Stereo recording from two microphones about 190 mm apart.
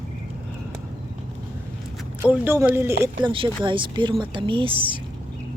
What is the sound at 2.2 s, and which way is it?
Speech, 10° right (ahead or behind).